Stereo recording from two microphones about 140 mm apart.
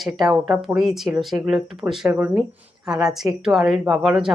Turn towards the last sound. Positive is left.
turn(degrees=-5)  # may be behind; listen again after turning